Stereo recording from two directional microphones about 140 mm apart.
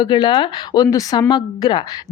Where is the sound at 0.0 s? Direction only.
30° left (ahead or behind).